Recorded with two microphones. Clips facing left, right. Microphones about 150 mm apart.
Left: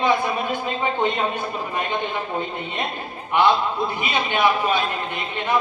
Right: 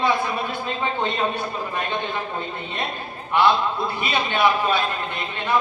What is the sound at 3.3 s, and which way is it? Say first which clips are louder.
A man's voice: left 1 dB; 15° left (ahead or behind).